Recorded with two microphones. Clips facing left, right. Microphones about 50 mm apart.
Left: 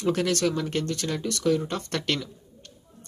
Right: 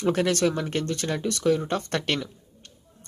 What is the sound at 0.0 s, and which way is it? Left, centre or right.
Speech, centre.